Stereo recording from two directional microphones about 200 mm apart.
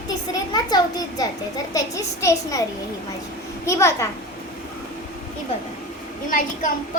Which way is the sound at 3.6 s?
15° left (ahead or behind).